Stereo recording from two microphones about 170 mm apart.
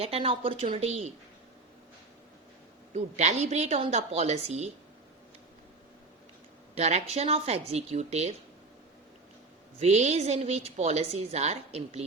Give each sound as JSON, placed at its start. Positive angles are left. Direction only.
{"t": 0.0, "sound": "a woman's voice", "side_deg": -35}
{"t": 2.9, "sound": "a woman's voice", "side_deg": -40}
{"t": 6.7, "sound": "a woman's voice", "side_deg": -40}
{"t": 9.8, "sound": "a woman's voice", "side_deg": -40}